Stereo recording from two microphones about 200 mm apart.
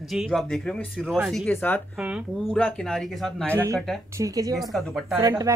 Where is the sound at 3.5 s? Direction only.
15° right (ahead or behind).